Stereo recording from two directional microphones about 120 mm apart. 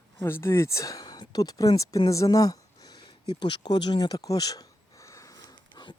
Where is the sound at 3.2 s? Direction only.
40° left (ahead or behind).